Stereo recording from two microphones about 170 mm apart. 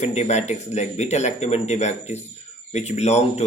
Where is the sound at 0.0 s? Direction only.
40° left (ahead or behind).